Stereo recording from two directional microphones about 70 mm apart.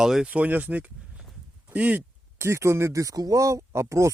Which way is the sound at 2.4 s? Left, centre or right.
Right.